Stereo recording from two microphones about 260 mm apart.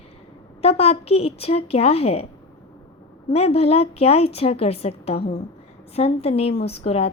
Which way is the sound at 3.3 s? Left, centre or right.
Left.